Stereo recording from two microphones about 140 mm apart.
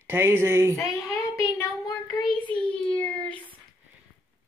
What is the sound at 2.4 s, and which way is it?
Speech, 10° left (ahead or behind).